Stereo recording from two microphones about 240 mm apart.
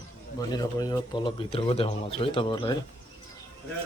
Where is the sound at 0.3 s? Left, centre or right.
Centre.